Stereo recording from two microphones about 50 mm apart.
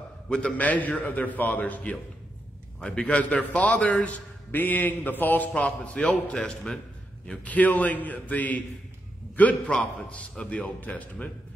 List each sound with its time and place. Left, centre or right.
0.3 s a man's voice: centre
0.6 s a man's voice: left
5.5 s a man's voice: left
7.4 s a man's voice: left
9.7 s a man's voice: left